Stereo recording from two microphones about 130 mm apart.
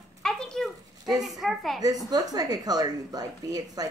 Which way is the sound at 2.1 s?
30° right (ahead or behind).